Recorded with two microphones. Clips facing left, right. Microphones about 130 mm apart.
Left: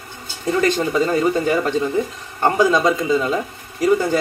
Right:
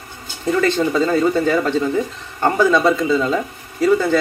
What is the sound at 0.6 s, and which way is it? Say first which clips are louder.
Speech: right 1 dB; 15° left (ahead or behind).